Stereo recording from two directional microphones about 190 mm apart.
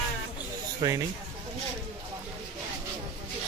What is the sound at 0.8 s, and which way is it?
Speech, 25° right (ahead or behind).